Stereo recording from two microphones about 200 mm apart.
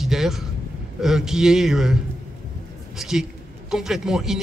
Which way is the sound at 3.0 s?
Centre (ahead or behind).